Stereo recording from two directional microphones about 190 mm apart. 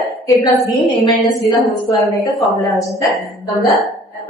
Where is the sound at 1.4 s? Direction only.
Centre (ahead or behind).